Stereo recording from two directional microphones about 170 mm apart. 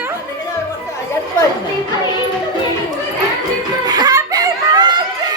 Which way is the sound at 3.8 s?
25° right (ahead or behind).